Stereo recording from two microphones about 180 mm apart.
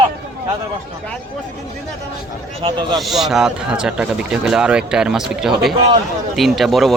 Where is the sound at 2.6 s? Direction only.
25° right (ahead or behind).